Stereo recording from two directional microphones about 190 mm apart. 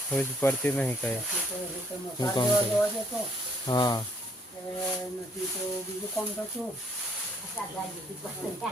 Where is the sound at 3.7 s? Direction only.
20° left (ahead or behind).